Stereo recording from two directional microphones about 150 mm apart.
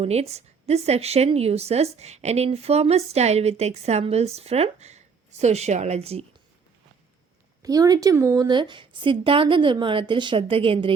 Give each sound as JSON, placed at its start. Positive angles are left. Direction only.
{"t": 0.0, "sound": "speech", "side_deg": -45}
{"t": 7.6, "sound": "a woman's voice", "side_deg": -25}